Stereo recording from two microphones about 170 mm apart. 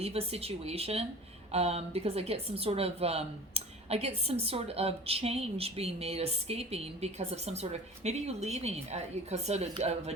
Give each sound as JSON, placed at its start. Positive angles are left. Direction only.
{"t": 0.0, "sound": "a woman's voice", "side_deg": -35}